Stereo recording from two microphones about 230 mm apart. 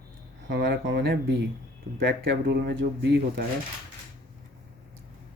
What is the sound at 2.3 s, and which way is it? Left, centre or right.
Speech, right.